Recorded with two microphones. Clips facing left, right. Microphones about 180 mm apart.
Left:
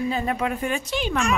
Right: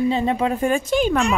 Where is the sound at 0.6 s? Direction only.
45° right (ahead or behind).